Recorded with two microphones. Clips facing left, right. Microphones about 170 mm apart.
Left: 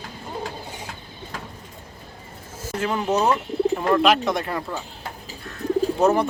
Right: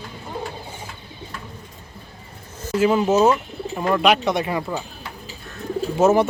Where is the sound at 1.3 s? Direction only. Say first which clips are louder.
Left 3 dB; 90° left.